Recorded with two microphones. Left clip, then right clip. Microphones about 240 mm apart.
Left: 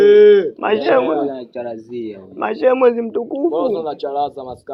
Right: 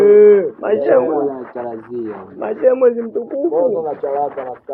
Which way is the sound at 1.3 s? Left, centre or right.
Centre.